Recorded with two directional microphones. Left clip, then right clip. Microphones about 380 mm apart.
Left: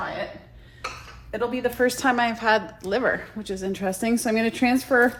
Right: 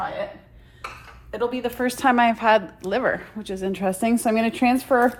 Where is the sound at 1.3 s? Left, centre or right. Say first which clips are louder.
Even; centre.